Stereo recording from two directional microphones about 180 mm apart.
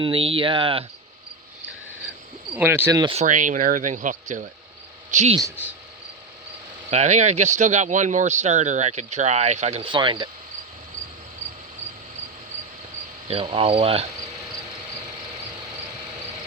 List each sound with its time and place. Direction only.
0.0 s speech: 30° right (ahead or behind)
2.6 s speech: 10° right (ahead or behind)
3.2 s speech: 45° right (ahead or behind)
5.4 s speech: 15° right (ahead or behind)
6.9 s speech: 40° right (ahead or behind)
13.2 s speech: 35° right (ahead or behind)